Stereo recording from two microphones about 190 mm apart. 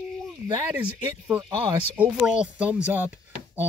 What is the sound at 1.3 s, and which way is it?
Speech, 25° right (ahead or behind).